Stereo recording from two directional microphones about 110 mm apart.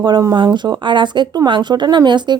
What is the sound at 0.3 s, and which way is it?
Speech, 40° right (ahead or behind).